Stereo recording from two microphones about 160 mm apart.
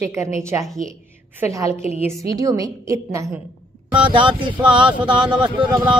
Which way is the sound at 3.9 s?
30° right (ahead or behind).